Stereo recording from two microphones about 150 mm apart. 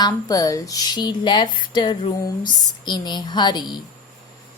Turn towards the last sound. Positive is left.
turn(degrees=30)  # may be behind; listen again after turning